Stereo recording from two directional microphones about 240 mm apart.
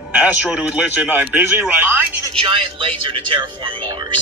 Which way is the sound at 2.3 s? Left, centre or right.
Right.